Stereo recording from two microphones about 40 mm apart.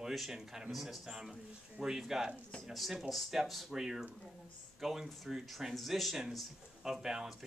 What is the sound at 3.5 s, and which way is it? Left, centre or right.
Speech, centre.